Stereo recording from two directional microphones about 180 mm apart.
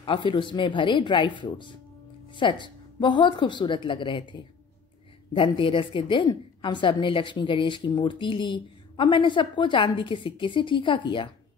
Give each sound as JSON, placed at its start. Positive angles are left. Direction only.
{"t": 0.0, "sound": "a woman's voice", "side_deg": 30}